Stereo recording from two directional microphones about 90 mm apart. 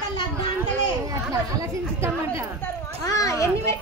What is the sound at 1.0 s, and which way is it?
Speech, 40° right (ahead or behind).